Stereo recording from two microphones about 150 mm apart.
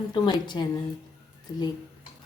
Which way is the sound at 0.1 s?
30° left (ahead or behind).